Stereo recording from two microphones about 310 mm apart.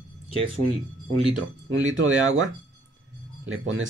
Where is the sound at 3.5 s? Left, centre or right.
Right.